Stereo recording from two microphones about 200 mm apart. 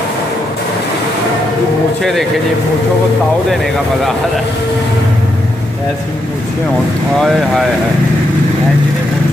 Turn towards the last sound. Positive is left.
turn(degrees=0)  # may be behind; listen again after turning